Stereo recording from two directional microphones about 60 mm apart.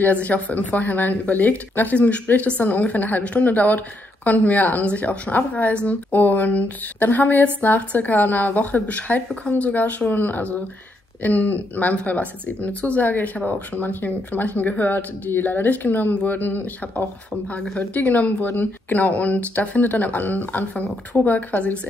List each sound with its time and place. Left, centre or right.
0.0 s a woman's voice: left
18.0 s a woman's voice: left